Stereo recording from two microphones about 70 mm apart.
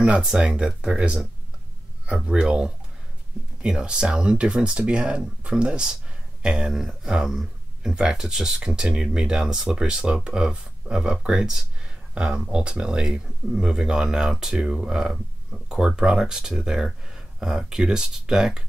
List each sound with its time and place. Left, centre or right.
0.0 s speech: centre